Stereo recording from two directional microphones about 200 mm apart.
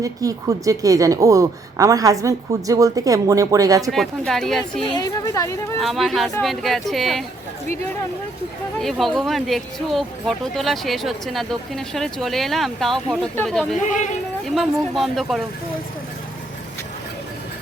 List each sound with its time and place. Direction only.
0.0 s a woman's voice: 15° right (ahead or behind)
3.9 s speech: centre (ahead or behind)
4.9 s a woman's voice: 20° left (ahead or behind)
5.8 s speech: centre (ahead or behind)
8.8 s speech: centre (ahead or behind)
13.8 s speech: 40° left (ahead or behind)
14.4 s speech: centre (ahead or behind)